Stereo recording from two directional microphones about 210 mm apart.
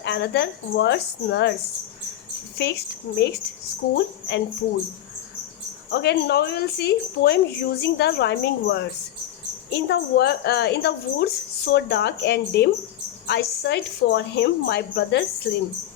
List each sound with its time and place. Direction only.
0.0 s a woman's voice: 55° left (ahead or behind)
2.6 s a woman's voice: 55° left (ahead or behind)
5.9 s a woman's voice: 55° left (ahead or behind)